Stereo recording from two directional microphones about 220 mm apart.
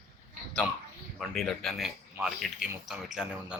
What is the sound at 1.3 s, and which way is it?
Speech, centre (ahead or behind).